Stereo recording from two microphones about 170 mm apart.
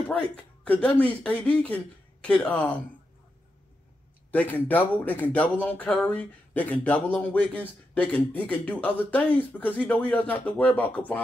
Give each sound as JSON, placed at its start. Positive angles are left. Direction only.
{"t": 0.7, "sound": "speech", "side_deg": 10}
{"t": 4.3, "sound": "speech", "side_deg": 10}